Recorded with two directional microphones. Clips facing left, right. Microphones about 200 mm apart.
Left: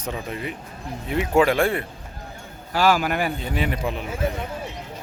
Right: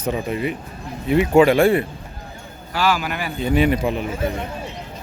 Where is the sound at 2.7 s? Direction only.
50° left (ahead or behind).